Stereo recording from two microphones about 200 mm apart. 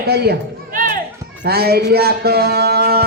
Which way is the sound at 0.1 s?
55° right (ahead or behind).